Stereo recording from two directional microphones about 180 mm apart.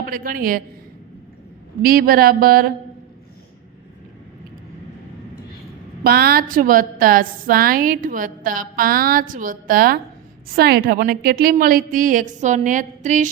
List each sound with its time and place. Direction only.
0.0 s speech: 55° right (ahead or behind)
1.8 s a woman's voice: 55° right (ahead or behind)
6.0 s a woman's voice: 60° right (ahead or behind)